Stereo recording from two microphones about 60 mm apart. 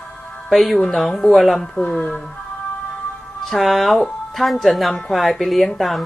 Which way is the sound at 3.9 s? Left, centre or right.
Centre.